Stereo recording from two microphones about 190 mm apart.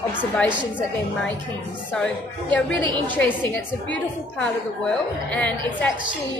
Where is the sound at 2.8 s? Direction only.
25° right (ahead or behind).